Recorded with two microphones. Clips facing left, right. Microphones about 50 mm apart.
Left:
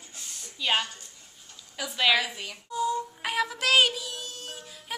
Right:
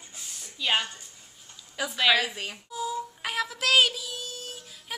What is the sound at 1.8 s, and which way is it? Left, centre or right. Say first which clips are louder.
Speech: right 1 dB; centre.